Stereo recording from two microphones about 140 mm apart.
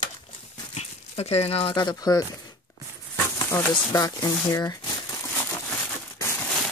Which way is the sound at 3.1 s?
15° left (ahead or behind).